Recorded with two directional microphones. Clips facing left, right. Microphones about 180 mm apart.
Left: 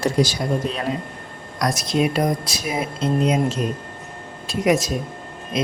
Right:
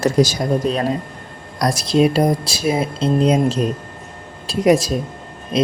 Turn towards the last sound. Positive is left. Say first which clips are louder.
# right 6 dB
turn(degrees=-35)  # may be behind; listen again after turning